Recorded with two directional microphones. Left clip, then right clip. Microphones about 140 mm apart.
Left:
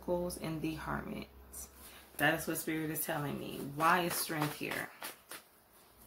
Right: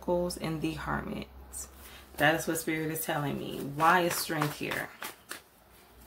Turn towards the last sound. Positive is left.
turn(degrees=-15)  # may be behind; listen again after turning